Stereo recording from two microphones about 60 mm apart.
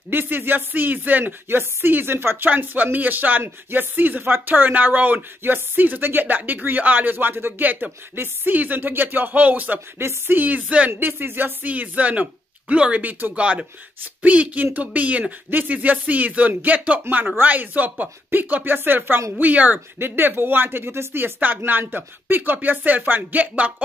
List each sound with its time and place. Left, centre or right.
0.1 s speech: right
1.2 s speech: right
10.0 s speech: right
10.4 s speech: right
10.9 s speech: right
11.6 s speech: right